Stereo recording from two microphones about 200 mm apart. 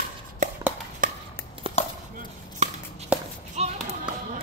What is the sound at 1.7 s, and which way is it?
Chopping, 25° right (ahead or behind).